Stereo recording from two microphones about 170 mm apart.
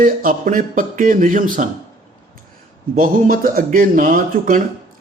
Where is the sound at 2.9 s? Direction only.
55° right (ahead or behind).